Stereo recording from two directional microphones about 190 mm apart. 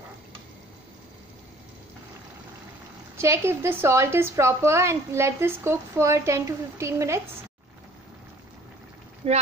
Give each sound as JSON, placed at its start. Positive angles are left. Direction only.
{"t": 3.2, "sound": "a woman's voice", "side_deg": -15}
{"t": 9.2, "sound": "speech", "side_deg": -30}